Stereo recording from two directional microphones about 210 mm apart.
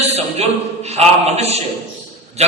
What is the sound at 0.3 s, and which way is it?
A man's voice, 30° right (ahead or behind).